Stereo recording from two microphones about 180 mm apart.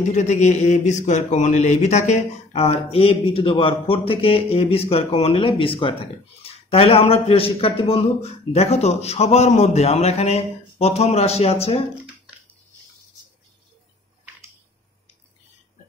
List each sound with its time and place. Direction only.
0.1 s speech: 40° left (ahead or behind)